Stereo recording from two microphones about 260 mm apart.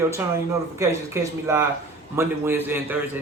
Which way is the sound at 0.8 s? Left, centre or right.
Centre.